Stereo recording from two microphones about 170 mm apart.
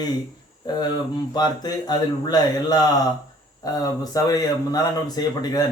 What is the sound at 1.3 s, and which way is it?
A man's voice, 25° left (ahead or behind).